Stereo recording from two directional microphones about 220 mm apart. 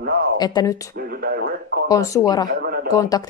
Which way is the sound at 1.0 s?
45° right (ahead or behind).